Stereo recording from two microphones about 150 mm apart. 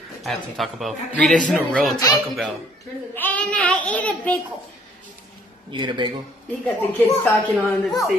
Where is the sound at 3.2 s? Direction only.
10° left (ahead or behind).